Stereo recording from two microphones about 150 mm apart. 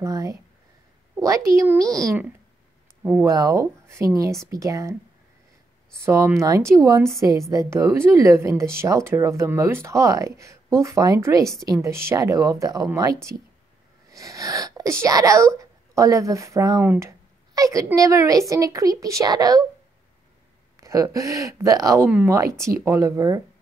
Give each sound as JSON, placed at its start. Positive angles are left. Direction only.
{"t": 0.0, "sound": "a woman's voice", "side_deg": -20}
{"t": 3.2, "sound": "speech", "side_deg": -25}
{"t": 6.0, "sound": "speech", "side_deg": -15}
{"t": 20.7, "sound": "speech", "side_deg": -20}